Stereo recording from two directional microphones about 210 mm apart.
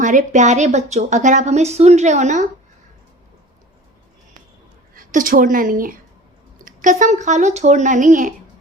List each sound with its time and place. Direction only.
0.0 s a woman's voice: 35° right (ahead or behind)
4.9 s a woman's voice: 40° right (ahead or behind)